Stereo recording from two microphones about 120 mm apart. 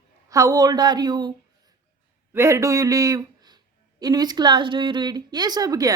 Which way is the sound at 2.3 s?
25° right (ahead or behind).